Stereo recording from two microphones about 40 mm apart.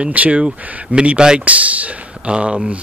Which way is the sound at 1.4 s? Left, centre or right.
Right.